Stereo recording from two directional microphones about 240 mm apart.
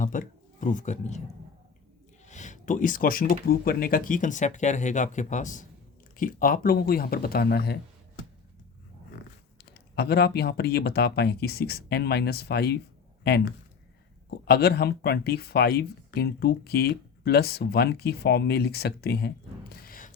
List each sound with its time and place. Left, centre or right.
0.0 s speech: left
2.2 s speech: left
9.9 s speech: left
14.3 s speech: left
19.8 s a sound: left